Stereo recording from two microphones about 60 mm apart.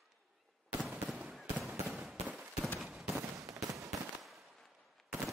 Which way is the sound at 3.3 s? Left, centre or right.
Right.